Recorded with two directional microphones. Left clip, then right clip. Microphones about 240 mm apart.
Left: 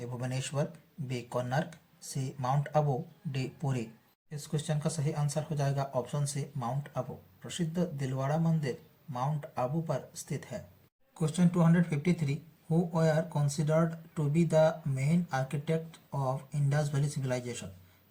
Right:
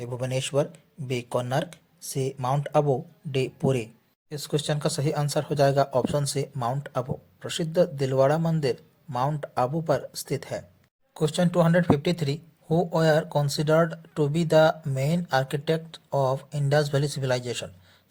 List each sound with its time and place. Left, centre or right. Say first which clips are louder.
0.0 s speech: right 9 dB; right